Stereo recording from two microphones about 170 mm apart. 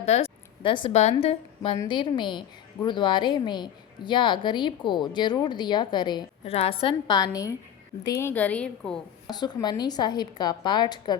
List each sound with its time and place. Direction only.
0.0 s a woman's voice: 35° left (ahead or behind); by 7.5 s 20° left (ahead or behind)
8.2 s a woman's voice: 10° left (ahead or behind)
9.2 s a woman's voice: 25° left (ahead or behind)